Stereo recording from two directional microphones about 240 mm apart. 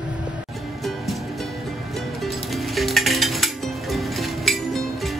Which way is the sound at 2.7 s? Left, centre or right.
Centre.